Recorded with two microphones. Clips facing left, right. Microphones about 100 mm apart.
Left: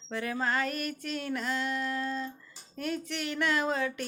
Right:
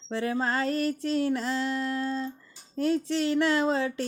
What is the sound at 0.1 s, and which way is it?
Speech, 30° right (ahead or behind).